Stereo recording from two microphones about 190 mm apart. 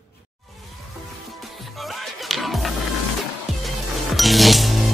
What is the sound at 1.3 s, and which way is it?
Music, centre (ahead or behind).